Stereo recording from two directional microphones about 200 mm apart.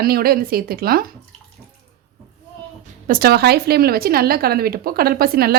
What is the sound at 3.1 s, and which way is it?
A woman's voice, 50° right (ahead or behind).